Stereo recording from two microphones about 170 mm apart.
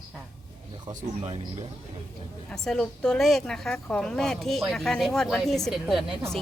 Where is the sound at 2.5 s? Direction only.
5° left (ahead or behind).